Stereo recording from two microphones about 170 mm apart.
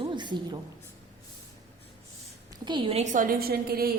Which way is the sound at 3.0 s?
50° right (ahead or behind).